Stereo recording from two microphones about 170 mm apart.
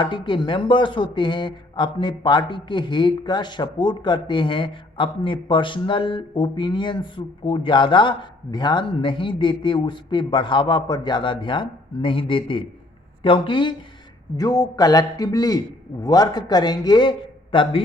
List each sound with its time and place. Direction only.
0.0 s speech: 30° left (ahead or behind)